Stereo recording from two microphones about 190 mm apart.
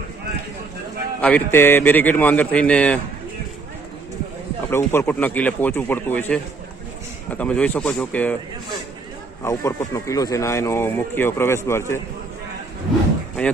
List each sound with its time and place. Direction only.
1.2 s speech: 10° left (ahead or behind)
4.7 s speech: 10° left (ahead or behind)
9.4 s speech: 15° left (ahead or behind)